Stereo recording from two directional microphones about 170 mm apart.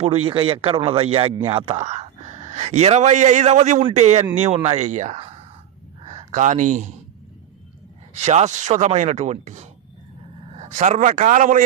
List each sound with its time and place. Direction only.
0.0 s speech: 35° right (ahead or behind)
8.1 s speech: 40° right (ahead or behind)